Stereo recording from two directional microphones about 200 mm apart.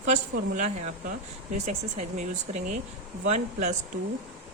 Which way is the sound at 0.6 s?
35° right (ahead or behind).